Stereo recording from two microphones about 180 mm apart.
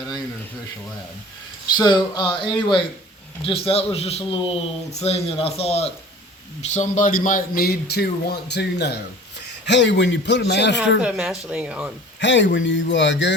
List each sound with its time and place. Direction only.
1.7 s a man's voice: 25° left (ahead or behind); by 10.8 s 70° left (ahead or behind)
11.0 s speech: 5° right (ahead or behind)
12.2 s speech: 85° left